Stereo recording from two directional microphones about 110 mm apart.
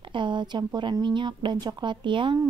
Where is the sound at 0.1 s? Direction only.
45° right (ahead or behind).